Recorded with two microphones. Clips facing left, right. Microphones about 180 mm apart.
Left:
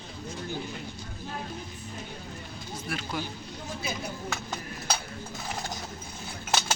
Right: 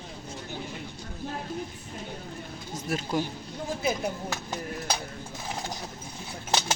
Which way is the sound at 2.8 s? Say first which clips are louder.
Right 6 dB; 40° right (ahead or behind).